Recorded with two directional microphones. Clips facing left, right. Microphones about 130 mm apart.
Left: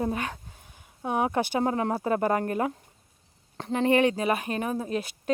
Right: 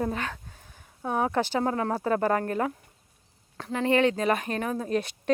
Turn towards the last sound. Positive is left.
turn(degrees=10)  # may be behind; listen again after turning